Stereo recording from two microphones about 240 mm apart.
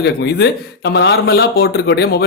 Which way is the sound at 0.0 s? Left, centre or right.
Left.